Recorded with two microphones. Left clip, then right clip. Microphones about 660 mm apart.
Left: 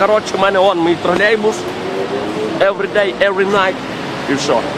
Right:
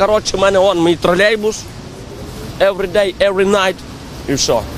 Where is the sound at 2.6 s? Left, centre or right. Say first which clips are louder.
Right 1 dB; right.